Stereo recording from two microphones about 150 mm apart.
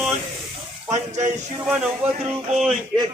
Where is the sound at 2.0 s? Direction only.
10° right (ahead or behind).